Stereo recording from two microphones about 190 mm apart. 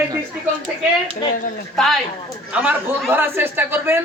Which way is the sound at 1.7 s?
Centre (ahead or behind).